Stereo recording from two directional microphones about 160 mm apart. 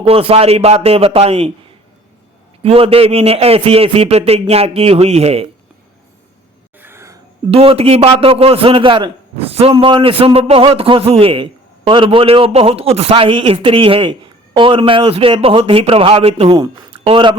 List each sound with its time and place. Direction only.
0.0 s a man's voice: 35° right (ahead or behind)
2.6 s a man's voice: 35° right (ahead or behind)
6.7 s a sound: 15° right (ahead or behind)
7.5 s a man's voice: 35° right (ahead or behind)